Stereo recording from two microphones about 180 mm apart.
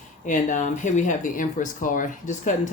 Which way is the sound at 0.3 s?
45° left (ahead or behind).